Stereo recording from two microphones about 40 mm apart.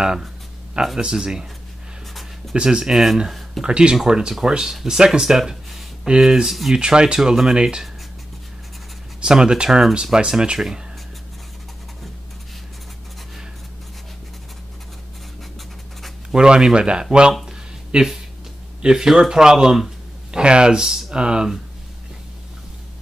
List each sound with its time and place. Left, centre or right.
0.9 s speech: centre
2.5 s speech: right
2.9 s speech: centre
3.6 s speech: right
6.4 s speech: centre
6.7 s speech: right
9.2 s speech: centre
16.3 s speech: right
21.1 s speech: right